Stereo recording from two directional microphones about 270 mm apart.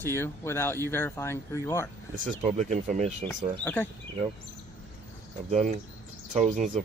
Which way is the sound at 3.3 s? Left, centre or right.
Centre.